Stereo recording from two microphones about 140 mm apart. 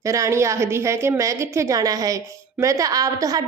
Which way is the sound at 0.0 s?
20° right (ahead or behind).